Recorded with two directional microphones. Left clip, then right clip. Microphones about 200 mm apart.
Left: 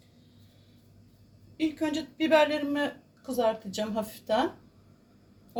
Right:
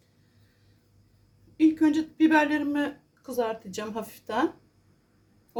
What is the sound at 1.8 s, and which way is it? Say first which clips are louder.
Speech: right 7 dB; 40° right (ahead or behind).